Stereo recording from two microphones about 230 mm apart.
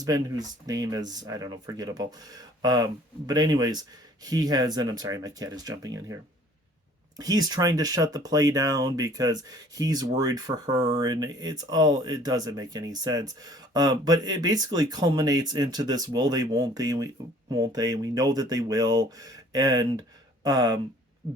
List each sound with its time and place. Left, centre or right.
0.0 s speech: centre
7.2 s speech: centre
21.2 s heart sounds: centre